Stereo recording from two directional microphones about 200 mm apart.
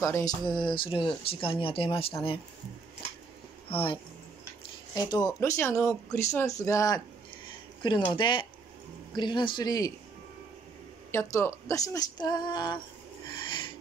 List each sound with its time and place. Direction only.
0.0 s speech: 15° left (ahead or behind)
3.6 s speech: 25° left (ahead or behind)
11.1 s speech: 15° left (ahead or behind)
13.5 s filing: 25° left (ahead or behind)